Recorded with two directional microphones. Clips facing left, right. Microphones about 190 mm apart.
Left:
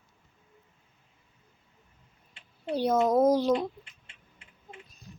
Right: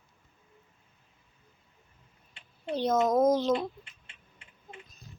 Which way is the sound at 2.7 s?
10° left (ahead or behind).